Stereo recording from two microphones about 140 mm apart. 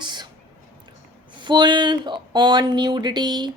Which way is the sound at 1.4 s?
35° right (ahead or behind).